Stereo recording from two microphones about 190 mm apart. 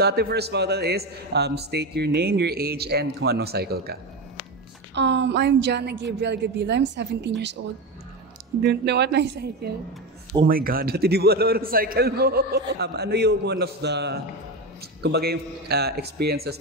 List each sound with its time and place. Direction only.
0.0 s a man's voice: 55° right (ahead or behind)
4.9 s a man's voice: 65° right (ahead or behind)
8.6 s a man's voice: 65° right (ahead or behind)
10.4 s a man's voice: 50° right (ahead or behind)